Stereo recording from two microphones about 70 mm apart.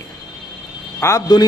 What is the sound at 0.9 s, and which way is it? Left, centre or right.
Speech, left.